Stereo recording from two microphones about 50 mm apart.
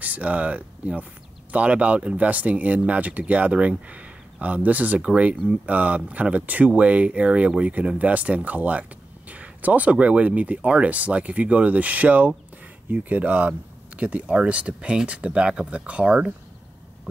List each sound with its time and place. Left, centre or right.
0.0 s speech: right